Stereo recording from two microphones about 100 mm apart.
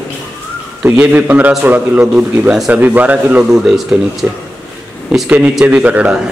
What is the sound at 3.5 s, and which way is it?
Speech, 5° right (ahead or behind).